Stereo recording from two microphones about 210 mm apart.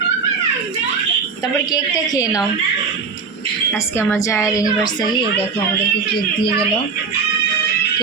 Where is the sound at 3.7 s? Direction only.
10° left (ahead or behind).